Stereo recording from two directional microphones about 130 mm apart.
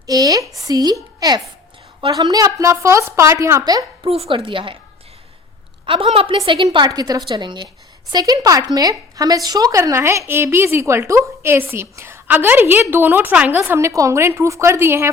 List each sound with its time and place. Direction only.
0.1 s a woman's voice: 25° right (ahead or behind)
0.6 s a sound: 30° right (ahead or behind)
2.0 s a woman's voice: 35° right (ahead or behind)
4.0 s speech: 50° right (ahead or behind)
5.8 s a woman's voice: 40° right (ahead or behind)
6.7 s a woman's voice: 35° right (ahead or behind)